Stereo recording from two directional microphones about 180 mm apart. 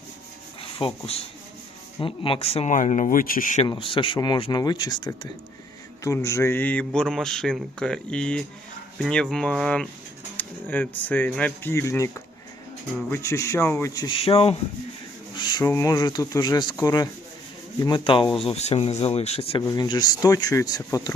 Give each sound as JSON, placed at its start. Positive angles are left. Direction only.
{"t": 0.6, "sound": "speech", "side_deg": 30}
{"t": 3.7, "sound": "a man's voice", "side_deg": 30}
{"t": 13.9, "sound": "speech", "side_deg": 25}
{"t": 19.6, "sound": "speech", "side_deg": 20}